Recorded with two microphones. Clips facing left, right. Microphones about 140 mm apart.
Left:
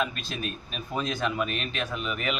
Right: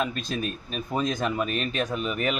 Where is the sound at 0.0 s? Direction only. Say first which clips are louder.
Right 3 dB; 40° right (ahead or behind).